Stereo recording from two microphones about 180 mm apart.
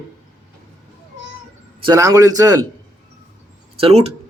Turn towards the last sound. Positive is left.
turn(degrees=-35)  # may be behind; listen again after turning